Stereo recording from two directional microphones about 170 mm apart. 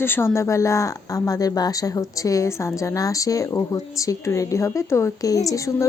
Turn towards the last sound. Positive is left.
turn(degrees=20)  # may be behind; listen again after turning